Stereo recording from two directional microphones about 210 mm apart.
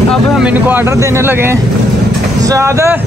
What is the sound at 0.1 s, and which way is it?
Speech, centre (ahead or behind).